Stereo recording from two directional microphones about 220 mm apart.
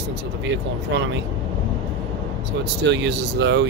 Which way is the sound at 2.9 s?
50° right (ahead or behind).